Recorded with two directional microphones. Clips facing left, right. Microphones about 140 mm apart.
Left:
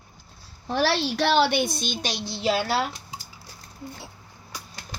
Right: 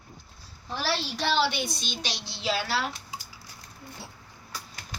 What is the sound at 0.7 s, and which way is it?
A child's voice, 70° left (ahead or behind).